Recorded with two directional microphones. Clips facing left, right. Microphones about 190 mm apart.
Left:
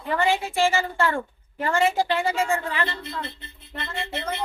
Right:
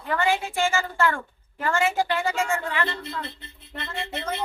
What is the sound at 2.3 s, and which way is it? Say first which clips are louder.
Speech: left 2 dB; 30° left (ahead or behind).